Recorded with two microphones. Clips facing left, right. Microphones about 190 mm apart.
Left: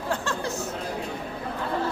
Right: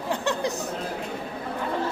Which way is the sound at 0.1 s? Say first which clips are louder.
Right 3 dB; 15° right (ahead or behind).